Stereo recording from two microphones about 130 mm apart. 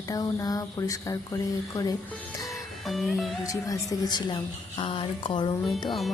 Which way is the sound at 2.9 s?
Centre (ahead or behind).